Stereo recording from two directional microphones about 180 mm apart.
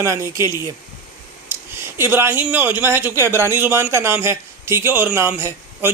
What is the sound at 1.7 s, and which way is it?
Speech, 15° right (ahead or behind).